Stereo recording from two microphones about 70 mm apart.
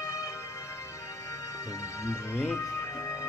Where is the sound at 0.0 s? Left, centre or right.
Left.